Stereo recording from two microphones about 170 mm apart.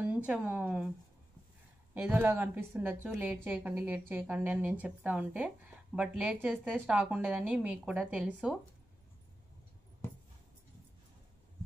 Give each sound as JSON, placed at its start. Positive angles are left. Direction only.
{"t": 0.0, "sound": "a woman's voice", "side_deg": -10}
{"t": 2.0, "sound": "a woman's voice", "side_deg": -10}